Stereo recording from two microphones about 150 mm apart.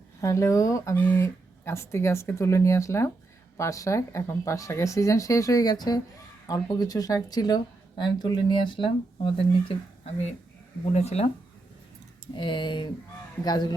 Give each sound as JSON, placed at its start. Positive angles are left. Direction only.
{"t": 0.2, "sound": "speech", "side_deg": 20}
{"t": 10.9, "sound": "speech", "side_deg": 45}
{"t": 12.3, "sound": "speech", "side_deg": 30}